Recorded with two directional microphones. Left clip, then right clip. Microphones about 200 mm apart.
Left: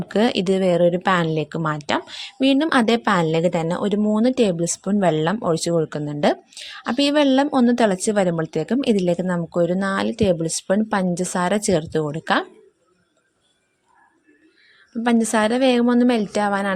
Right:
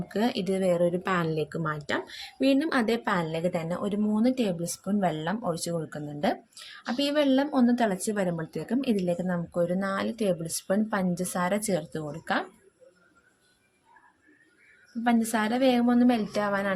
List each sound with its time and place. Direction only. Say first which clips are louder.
0.1 s speech: left 9 dB; 40° left (ahead or behind)
15.0 s a woman's voice: left 8 dB; 40° left (ahead or behind)